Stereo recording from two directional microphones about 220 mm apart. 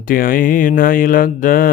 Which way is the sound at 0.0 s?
40° left (ahead or behind).